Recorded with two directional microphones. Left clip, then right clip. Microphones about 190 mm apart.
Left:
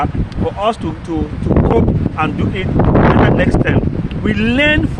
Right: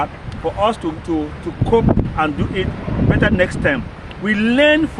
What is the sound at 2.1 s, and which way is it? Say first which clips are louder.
Speech: left 1 dB; 15° left (ahead or behind).